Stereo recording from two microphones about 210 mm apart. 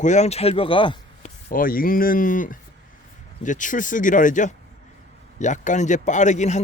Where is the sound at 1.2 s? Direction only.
40° left (ahead or behind).